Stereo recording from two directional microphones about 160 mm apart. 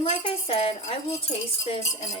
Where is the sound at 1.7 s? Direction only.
45° left (ahead or behind).